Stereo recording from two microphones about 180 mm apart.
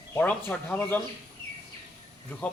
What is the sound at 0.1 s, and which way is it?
Speech, 10° left (ahead or behind).